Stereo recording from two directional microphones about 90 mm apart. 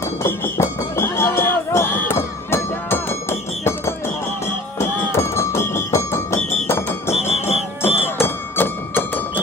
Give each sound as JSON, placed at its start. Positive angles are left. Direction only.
{"t": 0.2, "sound": "music", "side_deg": 30}
{"t": 7.8, "sound": "music", "side_deg": 90}
{"t": 8.2, "sound": "music", "side_deg": 25}